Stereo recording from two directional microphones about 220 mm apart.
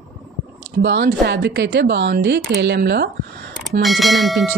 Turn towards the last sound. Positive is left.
turn(degrees=0)  # may be behind; listen again after turning